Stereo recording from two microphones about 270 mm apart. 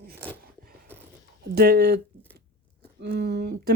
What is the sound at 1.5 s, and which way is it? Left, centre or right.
Speech, right.